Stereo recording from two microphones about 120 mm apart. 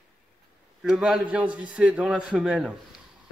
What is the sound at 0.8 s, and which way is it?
A man's voice, 5° right (ahead or behind).